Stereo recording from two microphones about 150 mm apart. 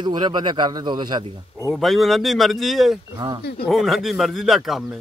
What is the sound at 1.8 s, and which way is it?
A man's voice, centre (ahead or behind).